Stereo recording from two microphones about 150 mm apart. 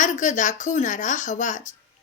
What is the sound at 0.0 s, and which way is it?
Speech, 55° left (ahead or behind).